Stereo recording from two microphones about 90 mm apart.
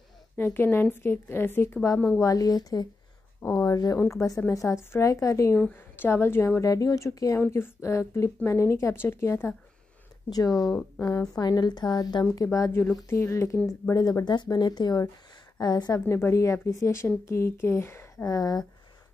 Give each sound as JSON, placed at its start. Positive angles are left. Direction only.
{"t": 0.4, "sound": "speech", "side_deg": 25}
{"t": 2.1, "sound": "speech", "side_deg": 40}
{"t": 6.6, "sound": "speech", "side_deg": 40}
{"t": 7.3, "sound": "speech", "side_deg": 25}
{"t": 10.3, "sound": "speech", "side_deg": 40}
{"t": 13.1, "sound": "speech", "side_deg": 30}
{"t": 13.7, "sound": "speech", "side_deg": 40}
{"t": 16.1, "sound": "speech", "side_deg": 30}